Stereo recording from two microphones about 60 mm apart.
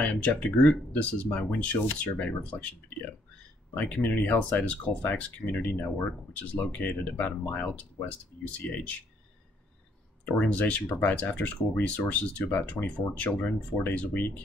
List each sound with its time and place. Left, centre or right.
0.0 s speech: left
10.2 s speech: left